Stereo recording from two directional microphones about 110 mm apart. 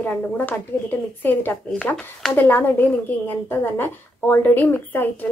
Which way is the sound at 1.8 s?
5° left (ahead or behind).